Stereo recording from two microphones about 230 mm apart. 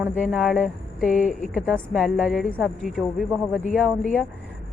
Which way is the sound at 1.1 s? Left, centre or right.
Left.